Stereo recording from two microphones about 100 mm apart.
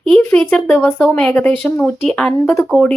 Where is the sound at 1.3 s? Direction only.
20° left (ahead or behind).